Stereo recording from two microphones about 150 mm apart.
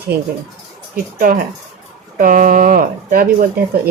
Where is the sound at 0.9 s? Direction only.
70° right (ahead or behind).